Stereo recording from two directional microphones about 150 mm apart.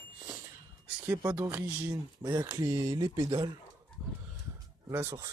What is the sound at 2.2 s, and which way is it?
Speech, 30° right (ahead or behind).